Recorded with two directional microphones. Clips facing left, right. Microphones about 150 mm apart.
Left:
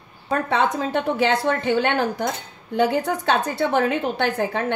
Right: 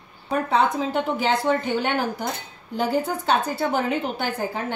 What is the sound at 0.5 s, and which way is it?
A woman's voice, 70° left (ahead or behind).